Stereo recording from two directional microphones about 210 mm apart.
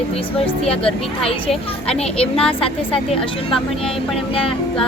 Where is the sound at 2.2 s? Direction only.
25° left (ahead or behind).